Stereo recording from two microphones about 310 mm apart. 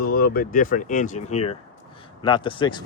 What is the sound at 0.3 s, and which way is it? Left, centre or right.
Speech, left.